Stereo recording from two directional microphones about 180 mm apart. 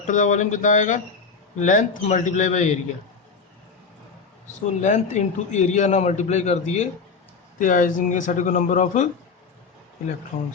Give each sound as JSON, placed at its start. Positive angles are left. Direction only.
{"t": 0.1, "sound": "speech", "side_deg": 45}
{"t": 4.8, "sound": "a man's voice", "side_deg": 40}